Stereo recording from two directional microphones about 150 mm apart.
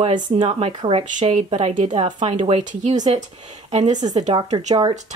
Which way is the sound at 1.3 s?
50° right (ahead or behind).